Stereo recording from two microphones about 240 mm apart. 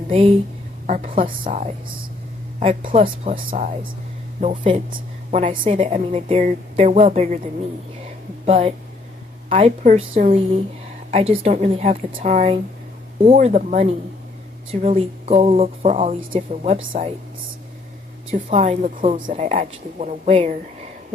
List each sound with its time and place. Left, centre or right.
0.9 s a woman's voice: right
8.4 s a woman's voice: right
18.3 s a woman's voice: right